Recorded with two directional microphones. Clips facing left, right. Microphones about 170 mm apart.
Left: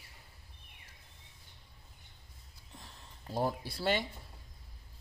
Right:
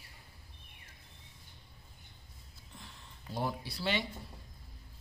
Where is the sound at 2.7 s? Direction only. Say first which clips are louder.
Even; 40° left (ahead or behind).